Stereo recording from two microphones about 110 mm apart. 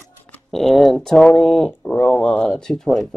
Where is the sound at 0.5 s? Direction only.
Centre (ahead or behind).